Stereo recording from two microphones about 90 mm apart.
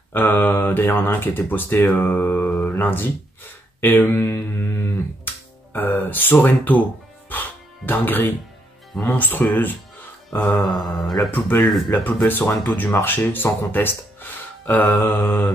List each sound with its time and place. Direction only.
0.1 s speech: 20° left (ahead or behind)
2.6 s a sound: 20° left (ahead or behind)
3.8 s music: 20° left (ahead or behind)
9.0 s speech: 20° left (ahead or behind)
10.6 s mantra: centre (ahead or behind)
11.2 s speech: 20° left (ahead or behind)